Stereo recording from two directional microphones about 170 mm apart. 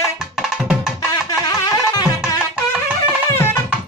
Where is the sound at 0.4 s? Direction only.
5° right (ahead or behind).